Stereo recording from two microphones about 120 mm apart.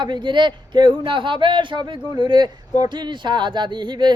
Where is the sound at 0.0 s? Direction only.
40° right (ahead or behind).